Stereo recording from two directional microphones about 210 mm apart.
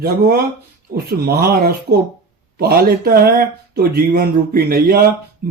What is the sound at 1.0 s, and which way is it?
Speech, 45° right (ahead or behind).